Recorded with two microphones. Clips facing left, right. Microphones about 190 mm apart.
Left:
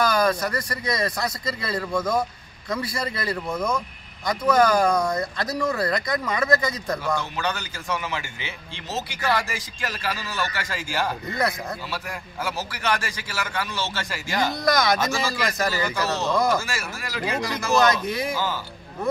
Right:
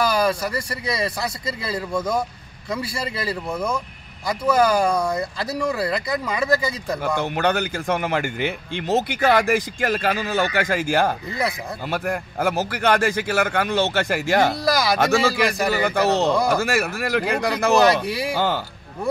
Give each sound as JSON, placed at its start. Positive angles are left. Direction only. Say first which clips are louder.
{"t": 0.0, "sound": "speech", "louder": "right 1 dB", "side_deg": -10}
{"t": 3.4, "sound": "speech", "louder": "right 1 dB", "side_deg": -10}
{"t": 6.4, "sound": "speech", "louder": "right 1 dB", "side_deg": -30}
{"t": 7.2, "sound": "speech", "louder": "right 7 dB", "side_deg": -60}
{"t": 14.6, "sound": "speech", "louder": "right 1 dB", "side_deg": -5}
{"t": 15.0, "sound": "speech", "louder": "right 7 dB", "side_deg": -65}
{"t": 18.0, "sound": "speech", "louder": "right 1 dB", "side_deg": -35}
{"t": 18.3, "sound": "speech", "louder": "right 5 dB", "side_deg": -65}